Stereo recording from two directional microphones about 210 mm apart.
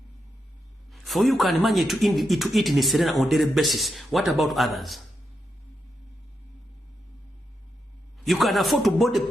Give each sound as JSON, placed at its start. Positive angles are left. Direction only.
{"t": 0.9, "sound": "a man's voice", "side_deg": 0}
{"t": 8.2, "sound": "a man's voice", "side_deg": 0}